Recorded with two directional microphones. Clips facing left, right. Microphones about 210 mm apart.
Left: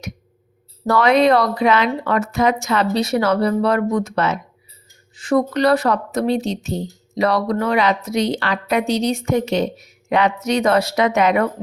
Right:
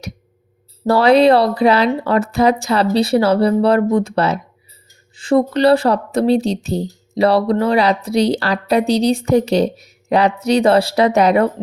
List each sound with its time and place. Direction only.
0.9 s speech: 30° right (ahead or behind)